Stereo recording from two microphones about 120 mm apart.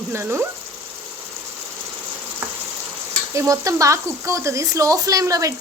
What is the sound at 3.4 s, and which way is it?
Speech, 25° right (ahead or behind).